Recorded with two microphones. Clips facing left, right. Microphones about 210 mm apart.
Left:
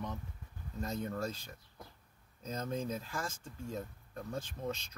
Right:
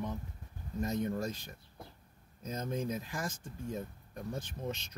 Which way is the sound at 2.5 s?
15° right (ahead or behind).